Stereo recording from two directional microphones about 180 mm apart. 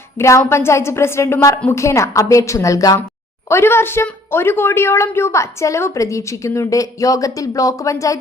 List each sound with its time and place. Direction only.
0.2 s a woman's voice: 15° left (ahead or behind)